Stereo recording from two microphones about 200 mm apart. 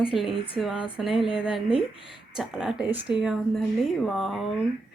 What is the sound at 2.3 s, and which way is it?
A woman's voice, 5° right (ahead or behind).